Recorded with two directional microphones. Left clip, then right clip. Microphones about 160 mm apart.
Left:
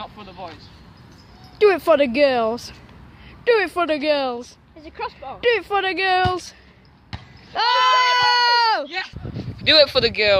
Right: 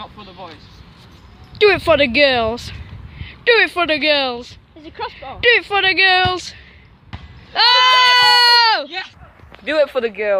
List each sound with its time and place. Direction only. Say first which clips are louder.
0.0 s vehicle: right 1 dB; 10° left (ahead or behind)
1.5 s speech: right 3 dB; 5° left (ahead or behind)
4.8 s speech: right 2 dB; 55° right (ahead or behind)
5.4 s speech: right 5 dB; 5° left (ahead or behind)
7.1 s sheep: right 3 dB; 5° left (ahead or behind)
8.9 s speech: right 1 dB; 15° right (ahead or behind)
9.8 s speech: left 1 dB; 25° left (ahead or behind)